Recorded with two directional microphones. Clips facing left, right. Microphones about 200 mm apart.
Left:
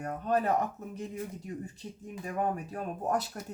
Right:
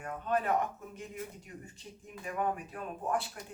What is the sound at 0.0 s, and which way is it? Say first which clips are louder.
Speech: left 3 dB; 40° left (ahead or behind).